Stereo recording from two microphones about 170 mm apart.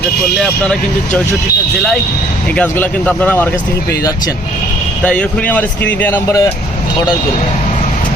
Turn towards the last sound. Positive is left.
turn(degrees=15)  # may be behind; listen again after turning